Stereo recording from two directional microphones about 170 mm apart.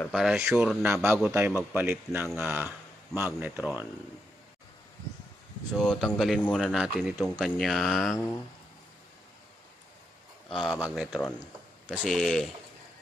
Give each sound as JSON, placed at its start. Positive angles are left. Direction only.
{"t": 0.1, "sound": "speech", "side_deg": -5}
{"t": 5.8, "sound": "speech", "side_deg": 0}
{"t": 10.5, "sound": "speech", "side_deg": 0}